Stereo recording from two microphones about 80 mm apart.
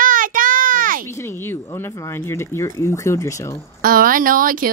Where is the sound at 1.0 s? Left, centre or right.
Left.